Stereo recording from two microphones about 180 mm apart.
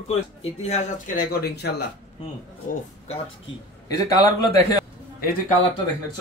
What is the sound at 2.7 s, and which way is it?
Speech, 50° left (ahead or behind).